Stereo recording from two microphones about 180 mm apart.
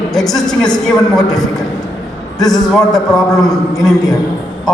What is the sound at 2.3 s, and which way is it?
Speech, 20° left (ahead or behind).